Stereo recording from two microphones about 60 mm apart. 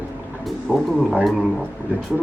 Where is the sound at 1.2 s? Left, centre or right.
Centre.